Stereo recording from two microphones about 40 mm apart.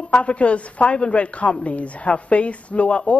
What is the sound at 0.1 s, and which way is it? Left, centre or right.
Speech, left.